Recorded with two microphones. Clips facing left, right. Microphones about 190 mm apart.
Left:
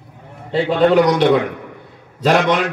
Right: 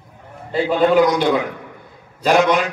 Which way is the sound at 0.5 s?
70° left (ahead or behind).